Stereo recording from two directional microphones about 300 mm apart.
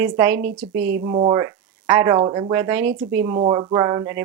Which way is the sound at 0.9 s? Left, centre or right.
Right.